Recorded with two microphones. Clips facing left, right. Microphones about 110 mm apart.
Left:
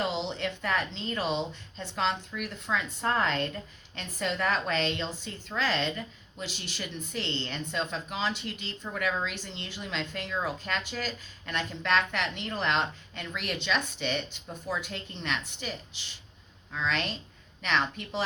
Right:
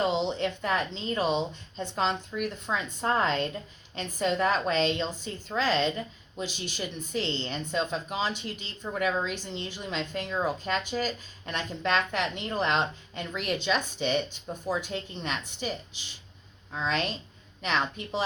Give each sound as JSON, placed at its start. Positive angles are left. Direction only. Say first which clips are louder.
{"t": 0.3, "sound": "speech", "louder": "right 3 dB", "side_deg": -20}
{"t": 14.7, "sound": "speech", "louder": "right 3 dB", "side_deg": -30}
{"t": 16.7, "sound": "speech", "louder": "right 2 dB", "side_deg": -20}